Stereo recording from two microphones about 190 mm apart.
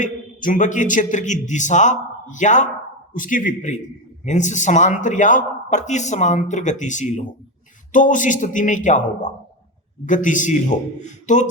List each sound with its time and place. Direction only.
0.0 s a man's voice: 45° left (ahead or behind)